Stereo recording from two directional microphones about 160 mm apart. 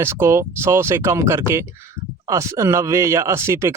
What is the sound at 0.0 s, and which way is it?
Speech, 15° right (ahead or behind).